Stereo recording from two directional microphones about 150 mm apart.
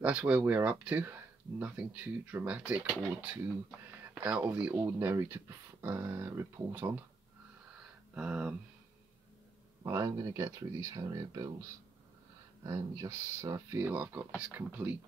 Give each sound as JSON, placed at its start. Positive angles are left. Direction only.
{"t": 0.0, "sound": "speech", "side_deg": -10}
{"t": 4.1, "sound": "speech", "side_deg": -5}
{"t": 8.1, "sound": "speech", "side_deg": -5}
{"t": 9.8, "sound": "speech", "side_deg": -20}
{"t": 12.6, "sound": "speech", "side_deg": -20}